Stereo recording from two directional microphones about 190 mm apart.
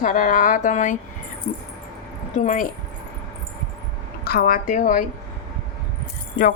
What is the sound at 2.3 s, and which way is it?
Speech, 40° left (ahead or behind).